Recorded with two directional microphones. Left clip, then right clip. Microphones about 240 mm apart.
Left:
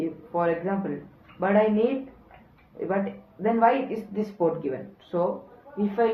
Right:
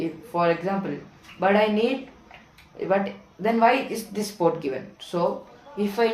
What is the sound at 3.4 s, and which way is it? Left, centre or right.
Speech, centre.